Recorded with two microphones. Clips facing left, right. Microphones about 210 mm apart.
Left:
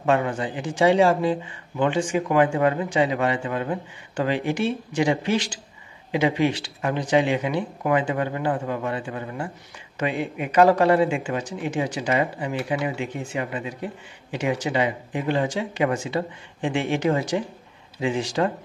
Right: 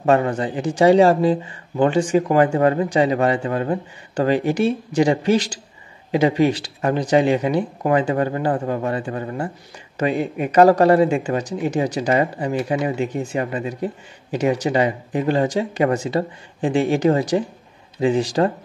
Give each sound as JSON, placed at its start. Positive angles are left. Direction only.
{"t": 0.0, "sound": "speech", "side_deg": -40}